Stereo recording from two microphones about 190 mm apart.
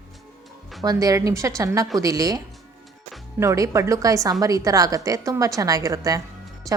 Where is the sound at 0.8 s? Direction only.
20° right (ahead or behind).